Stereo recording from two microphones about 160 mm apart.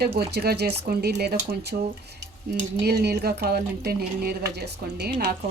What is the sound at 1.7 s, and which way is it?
Speech, 55° right (ahead or behind).